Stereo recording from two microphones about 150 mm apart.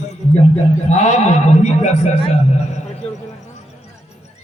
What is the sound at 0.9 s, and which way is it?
A man's voice, 50° left (ahead or behind).